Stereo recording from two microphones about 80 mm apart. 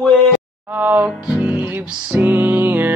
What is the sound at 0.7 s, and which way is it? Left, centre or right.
Music, right.